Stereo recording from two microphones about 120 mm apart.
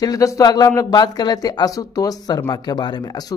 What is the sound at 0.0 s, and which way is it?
Speech, 30° left (ahead or behind).